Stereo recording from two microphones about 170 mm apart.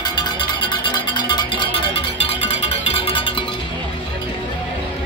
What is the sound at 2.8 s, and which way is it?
Music, 35° left (ahead or behind).